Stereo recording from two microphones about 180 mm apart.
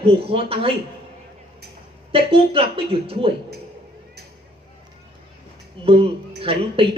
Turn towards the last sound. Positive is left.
turn(degrees=-30)  # may be behind; listen again after turning